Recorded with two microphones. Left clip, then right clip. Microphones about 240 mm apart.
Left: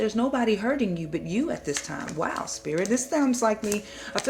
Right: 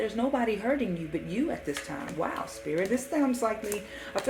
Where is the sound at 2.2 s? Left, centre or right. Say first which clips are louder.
Left 3 dB; left.